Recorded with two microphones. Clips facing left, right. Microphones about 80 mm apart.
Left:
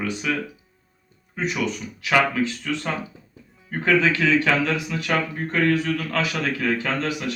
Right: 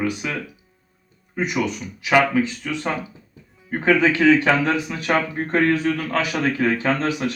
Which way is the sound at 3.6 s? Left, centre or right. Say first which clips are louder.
Right 2 dB; right.